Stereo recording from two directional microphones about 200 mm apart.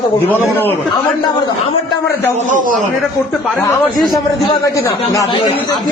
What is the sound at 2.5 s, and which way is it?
Speech, 45° right (ahead or behind).